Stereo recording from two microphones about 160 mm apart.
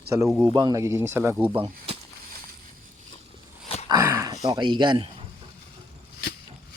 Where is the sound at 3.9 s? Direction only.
20° right (ahead or behind).